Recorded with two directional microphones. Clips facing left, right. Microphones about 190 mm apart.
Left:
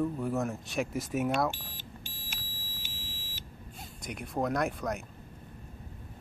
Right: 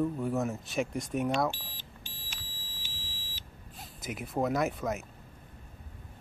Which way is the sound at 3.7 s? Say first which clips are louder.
Right 2 dB; centre (ahead or behind).